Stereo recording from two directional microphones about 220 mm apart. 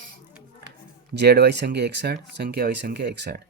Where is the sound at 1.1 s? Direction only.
50° right (ahead or behind).